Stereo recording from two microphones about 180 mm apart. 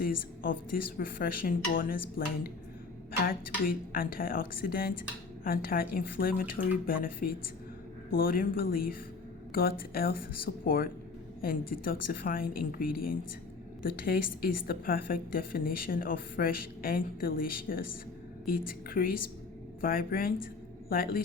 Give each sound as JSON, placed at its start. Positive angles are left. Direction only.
{"t": 0.0, "sound": "a woman's voice", "side_deg": 55}